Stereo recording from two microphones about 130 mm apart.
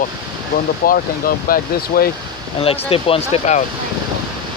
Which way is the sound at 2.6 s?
45° left (ahead or behind).